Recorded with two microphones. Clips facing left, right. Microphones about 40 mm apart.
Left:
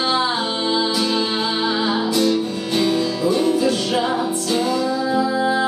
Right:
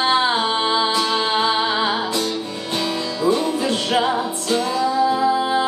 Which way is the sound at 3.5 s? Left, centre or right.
Right.